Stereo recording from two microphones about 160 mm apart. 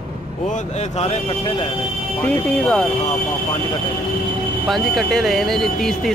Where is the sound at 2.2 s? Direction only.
10° left (ahead or behind).